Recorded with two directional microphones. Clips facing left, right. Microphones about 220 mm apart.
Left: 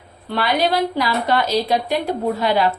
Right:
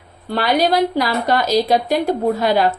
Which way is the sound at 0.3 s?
40° right (ahead or behind).